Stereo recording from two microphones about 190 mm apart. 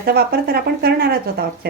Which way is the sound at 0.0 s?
55° right (ahead or behind).